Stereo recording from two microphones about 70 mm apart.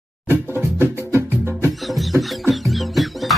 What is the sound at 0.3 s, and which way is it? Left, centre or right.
Music, right.